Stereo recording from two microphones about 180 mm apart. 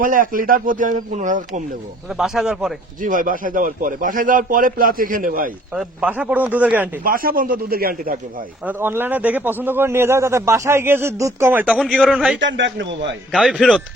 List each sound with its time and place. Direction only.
0.0 s a man's voice: 50° right (ahead or behind)
2.1 s speech: 5° right (ahead or behind)
3.0 s a man's voice: 50° right (ahead or behind)
5.7 s a man's voice: 5° right (ahead or behind)
7.0 s a man's voice: 50° right (ahead or behind)
8.6 s a man's voice: 10° right (ahead or behind)
12.4 s a man's voice: 90° right
13.3 s speech: centre (ahead or behind)